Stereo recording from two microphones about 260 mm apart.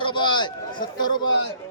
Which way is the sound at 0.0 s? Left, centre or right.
Centre.